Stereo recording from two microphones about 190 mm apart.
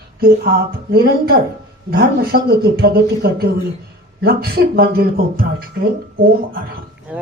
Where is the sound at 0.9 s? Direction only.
55° right (ahead or behind).